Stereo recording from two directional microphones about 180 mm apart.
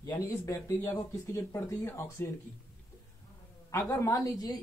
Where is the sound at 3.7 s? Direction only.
20° left (ahead or behind).